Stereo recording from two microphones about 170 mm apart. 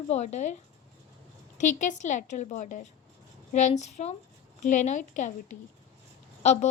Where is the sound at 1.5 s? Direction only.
45° left (ahead or behind).